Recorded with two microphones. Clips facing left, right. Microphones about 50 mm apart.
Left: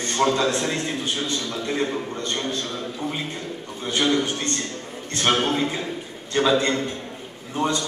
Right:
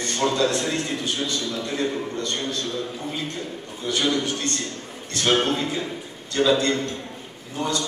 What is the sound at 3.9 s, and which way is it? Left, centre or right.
A man's voice, left.